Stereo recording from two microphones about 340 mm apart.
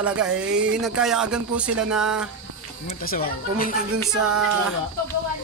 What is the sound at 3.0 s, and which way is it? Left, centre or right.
Speech, left.